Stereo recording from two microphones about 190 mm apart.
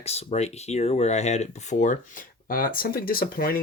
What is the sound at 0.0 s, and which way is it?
Speech, 35° left (ahead or behind).